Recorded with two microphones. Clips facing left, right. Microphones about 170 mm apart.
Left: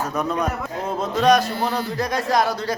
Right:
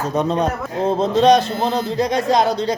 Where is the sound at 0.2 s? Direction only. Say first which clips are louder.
Right 5 dB; 25° right (ahead or behind).